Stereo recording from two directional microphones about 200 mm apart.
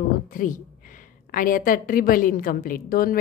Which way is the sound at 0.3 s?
45° left (ahead or behind).